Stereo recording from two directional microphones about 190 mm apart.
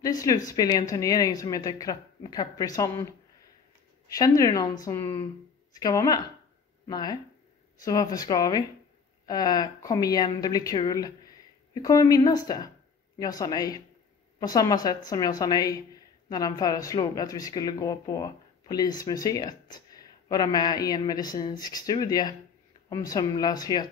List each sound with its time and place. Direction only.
0.0 s speech: 20° left (ahead or behind)
4.1 s speech: 20° left (ahead or behind)